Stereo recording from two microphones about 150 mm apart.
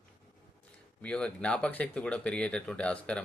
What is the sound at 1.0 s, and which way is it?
Speech, 10° left (ahead or behind).